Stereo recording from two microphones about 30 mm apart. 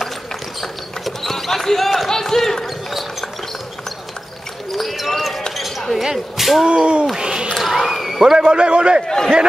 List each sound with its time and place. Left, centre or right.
0.6 s mechanisms: centre
1.3 s basketball bounce: centre
2.6 s basketball bounce: centre
4.6 s basketball bounce: centre
6.1 s a sound: centre
6.6 s a man's voice: right
7.2 s a sound: right
7.5 s a sound: centre
8.5 s a man's voice: right
9.0 s a man's voice: centre